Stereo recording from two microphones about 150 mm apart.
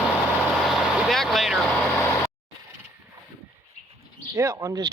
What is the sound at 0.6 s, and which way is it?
Vehicle, centre (ahead or behind).